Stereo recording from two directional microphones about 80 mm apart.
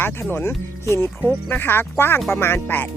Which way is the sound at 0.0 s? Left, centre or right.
Left.